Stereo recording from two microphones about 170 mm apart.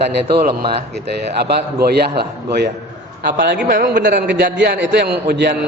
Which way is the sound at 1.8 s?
70° right (ahead or behind).